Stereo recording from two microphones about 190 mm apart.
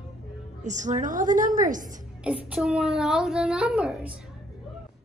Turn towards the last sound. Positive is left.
turn(degrees=0)  # may be behind; listen again after turning